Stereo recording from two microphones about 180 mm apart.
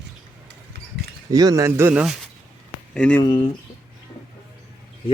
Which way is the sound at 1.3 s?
20° right (ahead or behind).